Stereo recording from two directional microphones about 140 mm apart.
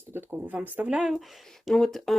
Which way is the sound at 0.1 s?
15° right (ahead or behind).